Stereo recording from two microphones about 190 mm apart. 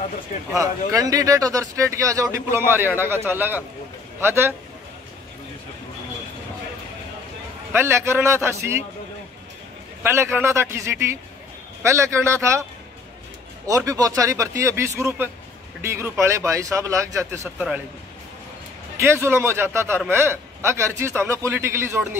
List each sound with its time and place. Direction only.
0.6 s speech: 15° right (ahead or behind)
7.7 s speech: 15° right (ahead or behind)
10.0 s speech: 15° right (ahead or behind)
13.7 s speech: 15° right (ahead or behind)
18.9 s speech: 15° right (ahead or behind)